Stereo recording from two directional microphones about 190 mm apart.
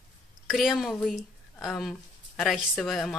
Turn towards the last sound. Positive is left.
turn(degrees=0)  # may be behind; listen again after turning